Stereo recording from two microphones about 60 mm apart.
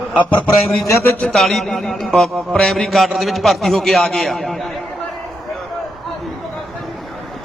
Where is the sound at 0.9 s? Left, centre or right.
Left.